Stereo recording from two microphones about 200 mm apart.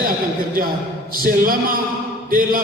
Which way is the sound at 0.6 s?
45° right (ahead or behind).